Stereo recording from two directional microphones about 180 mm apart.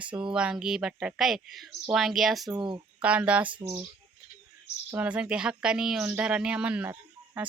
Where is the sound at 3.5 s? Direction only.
30° right (ahead or behind).